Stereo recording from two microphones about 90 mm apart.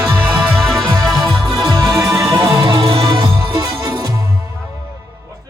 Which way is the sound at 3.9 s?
45° right (ahead or behind).